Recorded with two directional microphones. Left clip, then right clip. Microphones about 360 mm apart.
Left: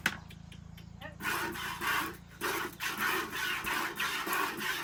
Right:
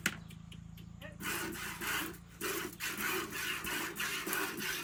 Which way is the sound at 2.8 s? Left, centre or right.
Centre.